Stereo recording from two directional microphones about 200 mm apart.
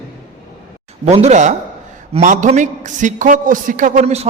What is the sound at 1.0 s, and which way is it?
A man's voice, 35° right (ahead or behind).